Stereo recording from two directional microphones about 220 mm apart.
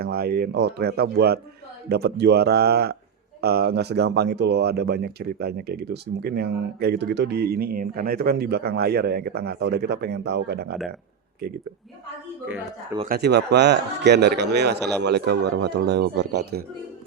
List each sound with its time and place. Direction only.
0.0 s speech: 45° right (ahead or behind)
13.1 s speech: 50° right (ahead or behind)